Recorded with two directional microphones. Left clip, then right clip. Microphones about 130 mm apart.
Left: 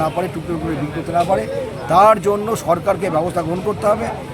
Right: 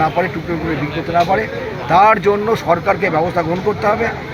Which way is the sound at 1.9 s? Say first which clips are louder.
Right 1 dB; 20° left (ahead or behind).